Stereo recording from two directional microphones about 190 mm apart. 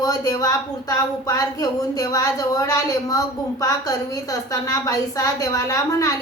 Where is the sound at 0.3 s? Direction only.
20° left (ahead or behind).